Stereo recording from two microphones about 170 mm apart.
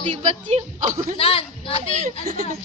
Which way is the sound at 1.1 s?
35° left (ahead or behind).